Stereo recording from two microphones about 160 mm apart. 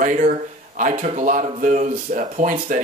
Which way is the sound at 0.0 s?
55° right (ahead or behind).